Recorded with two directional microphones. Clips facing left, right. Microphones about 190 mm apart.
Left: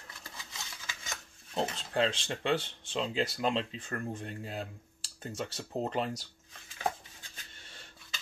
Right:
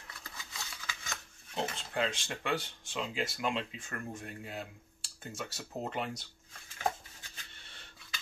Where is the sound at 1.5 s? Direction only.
30° left (ahead or behind).